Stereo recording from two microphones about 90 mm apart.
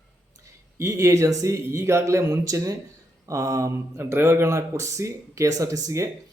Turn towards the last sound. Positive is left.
turn(degrees=-40)  # may be behind; listen again after turning